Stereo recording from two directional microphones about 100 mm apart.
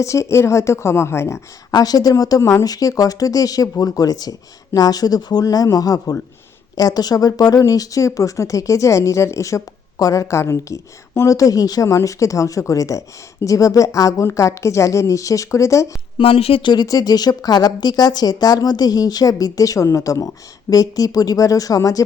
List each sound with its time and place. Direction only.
0.0 s a woman's voice: 30° left (ahead or behind)
1.7 s speech: 40° left (ahead or behind)
16.1 s speech: 70° left (ahead or behind)
16.7 s speech: 40° left (ahead or behind)